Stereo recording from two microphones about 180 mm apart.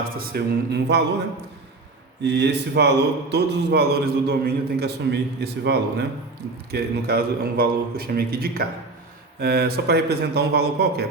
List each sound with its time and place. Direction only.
0.2 s a man's voice: 65° right (ahead or behind)
2.2 s a man's voice: 70° right (ahead or behind)